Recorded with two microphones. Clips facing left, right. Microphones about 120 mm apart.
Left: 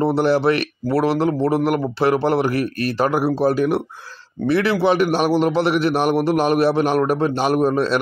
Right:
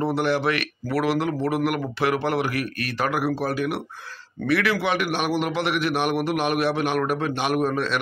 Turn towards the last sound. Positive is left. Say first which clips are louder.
# left 6 dB
turn(degrees=30)  # may be behind; listen again after turning